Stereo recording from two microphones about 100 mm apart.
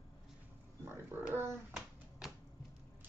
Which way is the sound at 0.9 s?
25° right (ahead or behind).